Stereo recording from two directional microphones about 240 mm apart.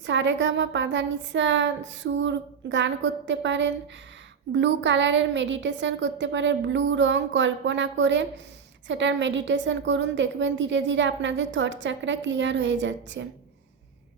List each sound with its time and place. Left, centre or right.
0.0 s a woman's voice: right